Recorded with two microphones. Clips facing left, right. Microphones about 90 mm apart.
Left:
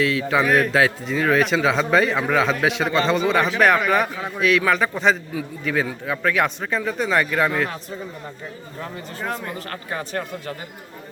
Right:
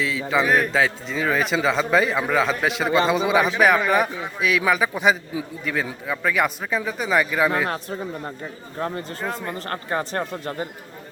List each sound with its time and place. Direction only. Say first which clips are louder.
0.0 s a man's voice: left 2 dB; centre (ahead or behind)
5.6 s a man's voice: left 4 dB; centre (ahead or behind)
9.2 s a man's voice: left 2 dB; 5° right (ahead or behind)
9.6 s speech: right 4 dB; 35° right (ahead or behind)